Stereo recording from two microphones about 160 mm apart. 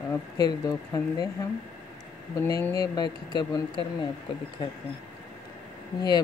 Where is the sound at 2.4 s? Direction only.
20° left (ahead or behind).